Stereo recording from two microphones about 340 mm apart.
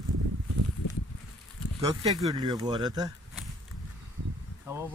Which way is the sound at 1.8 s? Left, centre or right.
Centre.